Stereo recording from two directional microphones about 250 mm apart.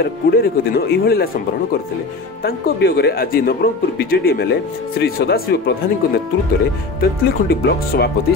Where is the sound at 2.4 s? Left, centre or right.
Left.